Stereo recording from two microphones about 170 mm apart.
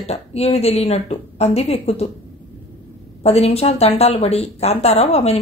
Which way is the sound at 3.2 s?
35° left (ahead or behind).